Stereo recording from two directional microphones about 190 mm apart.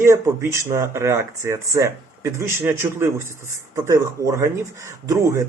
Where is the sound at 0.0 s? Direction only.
15° right (ahead or behind).